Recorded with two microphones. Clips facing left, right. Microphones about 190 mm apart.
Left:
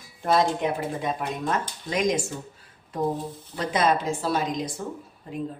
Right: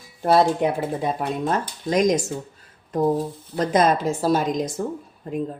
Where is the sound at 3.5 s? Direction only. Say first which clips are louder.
Right 4 dB; 45° right (ahead or behind).